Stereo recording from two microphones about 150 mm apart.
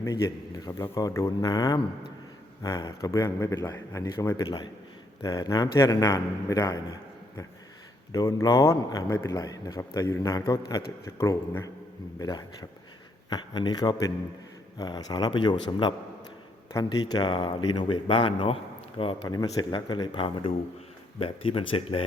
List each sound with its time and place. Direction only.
0.0 s a man's voice: 20° left (ahead or behind)
8.1 s a man's voice: 25° left (ahead or behind)
13.3 s a man's voice: 30° left (ahead or behind)